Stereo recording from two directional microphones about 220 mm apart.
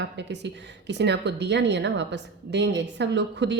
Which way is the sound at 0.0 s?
50° right (ahead or behind).